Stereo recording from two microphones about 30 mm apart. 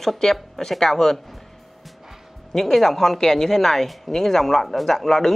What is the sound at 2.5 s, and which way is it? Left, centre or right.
Speech, centre.